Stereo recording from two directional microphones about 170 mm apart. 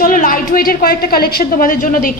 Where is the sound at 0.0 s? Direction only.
55° left (ahead or behind).